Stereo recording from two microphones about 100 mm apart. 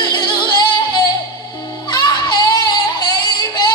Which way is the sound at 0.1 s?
45° left (ahead or behind).